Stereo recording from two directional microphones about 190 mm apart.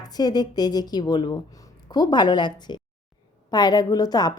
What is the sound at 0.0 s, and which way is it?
Speech, 20° left (ahead or behind).